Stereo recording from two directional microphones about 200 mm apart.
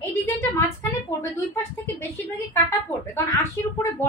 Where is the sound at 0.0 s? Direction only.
15° left (ahead or behind).